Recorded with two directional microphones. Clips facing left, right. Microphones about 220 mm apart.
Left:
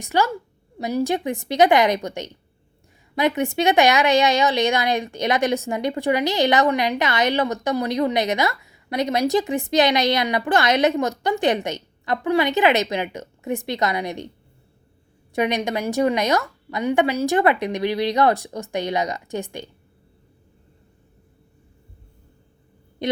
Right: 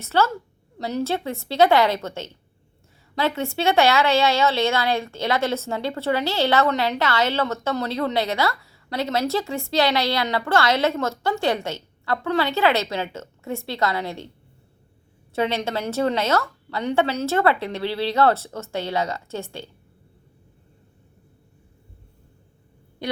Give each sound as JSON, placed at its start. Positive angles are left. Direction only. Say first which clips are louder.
{"t": 0.0, "sound": "a woman's voice", "louder": "even", "side_deg": 15}
{"t": 15.3, "sound": "a woman's voice", "louder": "left 2 dB", "side_deg": 15}